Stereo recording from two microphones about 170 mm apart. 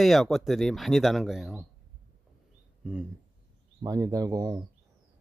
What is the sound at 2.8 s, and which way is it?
Speech, 5° right (ahead or behind).